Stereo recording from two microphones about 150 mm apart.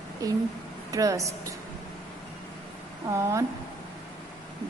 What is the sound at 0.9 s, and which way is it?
Speech, 25° right (ahead or behind).